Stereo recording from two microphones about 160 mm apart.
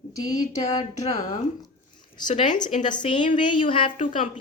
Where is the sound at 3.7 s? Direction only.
35° left (ahead or behind).